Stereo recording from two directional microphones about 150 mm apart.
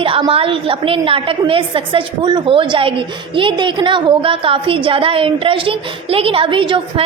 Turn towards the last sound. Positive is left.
turn(degrees=-35)  # may be behind; listen again after turning